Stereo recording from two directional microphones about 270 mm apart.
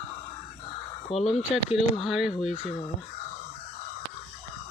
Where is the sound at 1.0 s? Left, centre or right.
Left.